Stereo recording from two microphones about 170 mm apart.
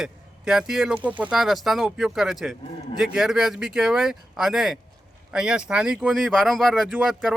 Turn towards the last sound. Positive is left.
turn(degrees=0)  # may be behind; listen again after turning